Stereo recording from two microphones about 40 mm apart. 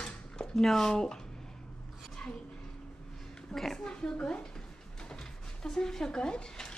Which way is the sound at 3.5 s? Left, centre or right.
Centre.